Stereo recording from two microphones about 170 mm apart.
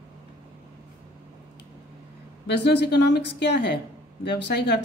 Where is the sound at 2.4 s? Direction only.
85° left.